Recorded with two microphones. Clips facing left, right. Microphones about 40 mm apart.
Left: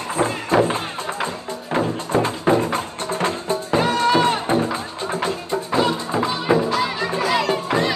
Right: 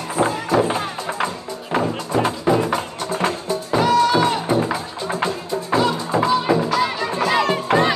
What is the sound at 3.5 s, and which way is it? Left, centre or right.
Music, left.